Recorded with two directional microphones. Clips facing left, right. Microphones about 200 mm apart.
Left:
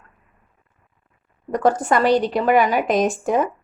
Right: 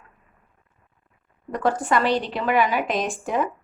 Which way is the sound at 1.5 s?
45° left (ahead or behind).